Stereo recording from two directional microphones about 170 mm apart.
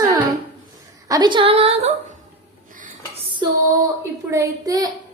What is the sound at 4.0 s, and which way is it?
Speech, 15° right (ahead or behind).